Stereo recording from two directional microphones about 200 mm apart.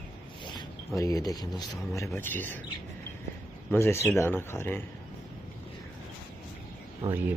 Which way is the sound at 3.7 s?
10° left (ahead or behind).